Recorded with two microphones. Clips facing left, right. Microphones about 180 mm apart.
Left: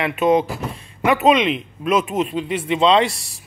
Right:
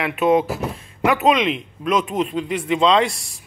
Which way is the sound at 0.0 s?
Centre (ahead or behind).